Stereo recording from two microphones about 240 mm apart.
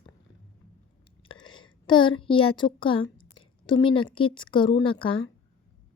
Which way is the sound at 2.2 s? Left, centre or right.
Left.